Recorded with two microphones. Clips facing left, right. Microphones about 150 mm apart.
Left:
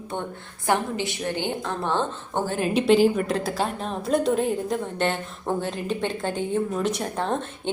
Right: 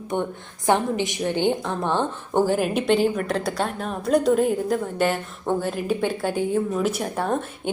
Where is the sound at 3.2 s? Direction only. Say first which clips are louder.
Right 1 dB; centre (ahead or behind).